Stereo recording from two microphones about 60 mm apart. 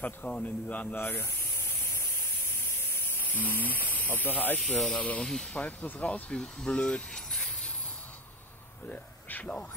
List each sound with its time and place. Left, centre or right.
0.0 s a man's voice: left
0.9 s spray: left
2.9 s speech: left
4.6 s speech: centre
5.0 s a man's voice: left
8.8 s speech: left